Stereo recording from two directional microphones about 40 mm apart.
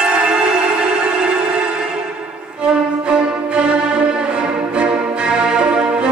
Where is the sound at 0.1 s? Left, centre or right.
Right.